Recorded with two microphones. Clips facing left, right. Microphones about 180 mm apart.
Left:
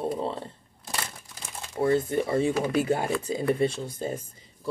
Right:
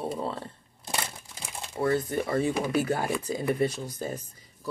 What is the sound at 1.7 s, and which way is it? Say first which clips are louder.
Speech: left 3 dB; 25° left (ahead or behind).